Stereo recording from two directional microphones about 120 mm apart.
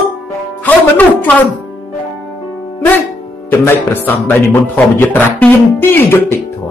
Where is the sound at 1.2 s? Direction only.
15° left (ahead or behind).